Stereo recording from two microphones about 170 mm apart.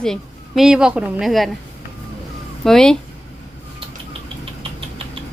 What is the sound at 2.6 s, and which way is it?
Speech, 5° left (ahead or behind).